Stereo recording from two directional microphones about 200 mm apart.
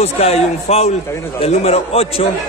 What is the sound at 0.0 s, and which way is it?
A man's voice, 30° left (ahead or behind).